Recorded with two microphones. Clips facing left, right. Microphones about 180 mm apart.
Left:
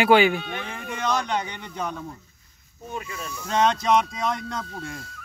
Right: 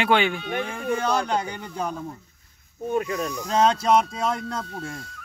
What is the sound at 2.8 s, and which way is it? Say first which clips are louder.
Speech: right 10 dB; 55° right (ahead or behind).